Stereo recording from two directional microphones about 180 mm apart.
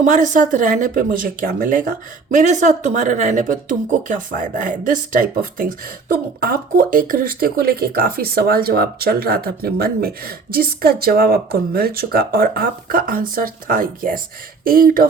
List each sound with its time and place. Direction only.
0.0 s speech: 45° right (ahead or behind)